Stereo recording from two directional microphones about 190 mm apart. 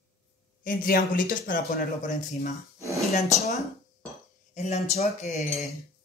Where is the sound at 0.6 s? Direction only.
45° left (ahead or behind).